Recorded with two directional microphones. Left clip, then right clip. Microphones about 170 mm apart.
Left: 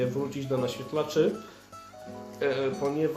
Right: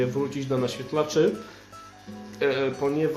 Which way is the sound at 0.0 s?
20° right (ahead or behind).